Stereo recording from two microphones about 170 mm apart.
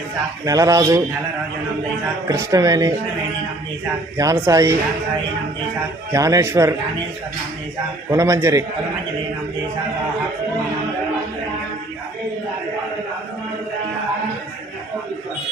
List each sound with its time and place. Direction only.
0.4 s a man's voice: 20° right (ahead or behind)
2.2 s speech: 20° right (ahead or behind)
4.2 s a man's voice: 15° right (ahead or behind)
6.1 s a man's voice: 20° right (ahead or behind)
8.1 s a man's voice: 15° right (ahead or behind)